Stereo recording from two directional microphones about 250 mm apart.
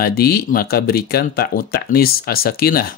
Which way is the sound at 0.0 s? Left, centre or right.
Left.